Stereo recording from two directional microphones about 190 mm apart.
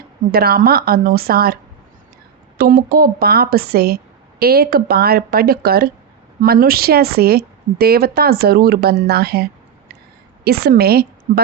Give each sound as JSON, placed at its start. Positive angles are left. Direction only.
{"t": 0.3, "sound": "a woman's voice", "side_deg": -55}
{"t": 2.6, "sound": "a woman's voice", "side_deg": -50}